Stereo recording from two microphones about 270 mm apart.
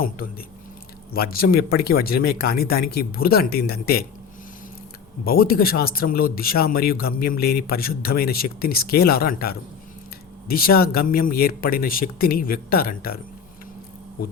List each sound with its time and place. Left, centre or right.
1.1 s speech: left
5.2 s speech: left